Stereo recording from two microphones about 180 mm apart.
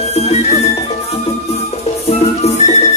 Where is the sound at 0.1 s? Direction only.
35° left (ahead or behind).